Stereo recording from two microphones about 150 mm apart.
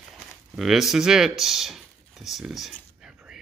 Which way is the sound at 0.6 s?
Centre (ahead or behind).